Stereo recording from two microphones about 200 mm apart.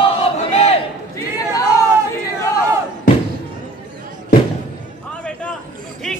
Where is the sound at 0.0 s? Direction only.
30° left (ahead or behind).